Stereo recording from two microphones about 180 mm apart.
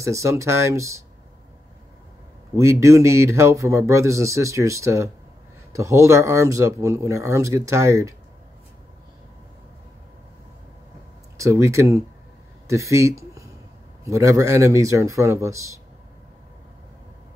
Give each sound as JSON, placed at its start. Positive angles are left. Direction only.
{"t": 0.0, "sound": "speech", "side_deg": -15}
{"t": 2.5, "sound": "speech", "side_deg": -15}
{"t": 11.3, "sound": "speech", "side_deg": -15}